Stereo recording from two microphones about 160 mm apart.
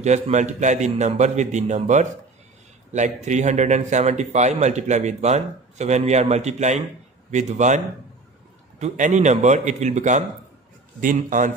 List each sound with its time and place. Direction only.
0.0 s a man's voice: 45° right (ahead or behind)